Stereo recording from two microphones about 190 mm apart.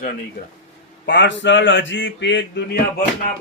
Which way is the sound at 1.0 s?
65° left (ahead or behind).